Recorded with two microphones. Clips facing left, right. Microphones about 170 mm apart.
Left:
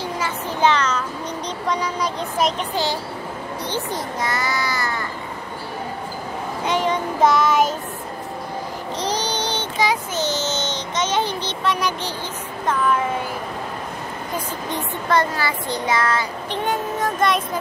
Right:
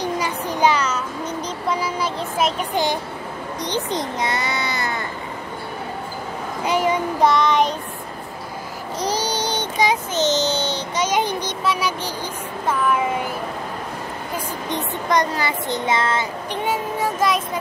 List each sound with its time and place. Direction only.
0.0 s child singing: 15° right (ahead or behind)
2.7 s a sound: 15° right (ahead or behind)
3.6 s a child's voice: 20° right (ahead or behind)
6.6 s a sound: 10° right (ahead or behind)
7.2 s child singing: 5° left (ahead or behind)
9.0 s child singing: 10° right (ahead or behind)
12.6 s a sound: 10° right (ahead or behind)
14.7 s speech: 20° right (ahead or behind)
16.6 s speech: 5° right (ahead or behind)